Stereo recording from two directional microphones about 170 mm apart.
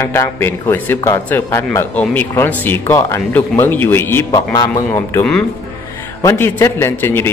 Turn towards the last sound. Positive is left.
turn(degrees=15)  # may be behind; listen again after turning